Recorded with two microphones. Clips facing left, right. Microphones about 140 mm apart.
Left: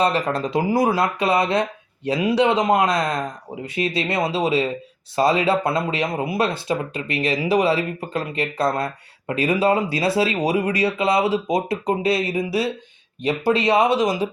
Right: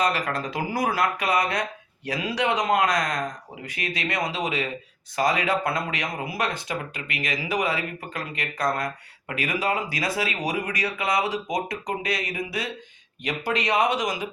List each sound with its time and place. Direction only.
0.0 s speech: 25° left (ahead or behind)